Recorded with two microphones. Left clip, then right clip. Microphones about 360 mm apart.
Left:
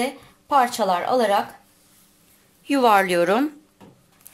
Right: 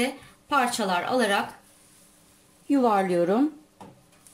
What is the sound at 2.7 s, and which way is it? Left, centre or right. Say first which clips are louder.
Speech: left 5 dB; left.